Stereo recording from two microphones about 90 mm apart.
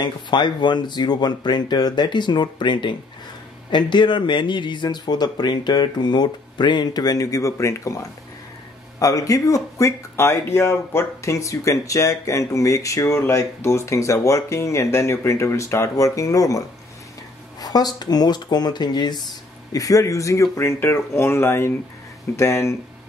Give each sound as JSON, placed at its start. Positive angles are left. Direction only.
{"t": 0.0, "sound": "speech", "side_deg": 55}
{"t": 19.7, "sound": "speech", "side_deg": 40}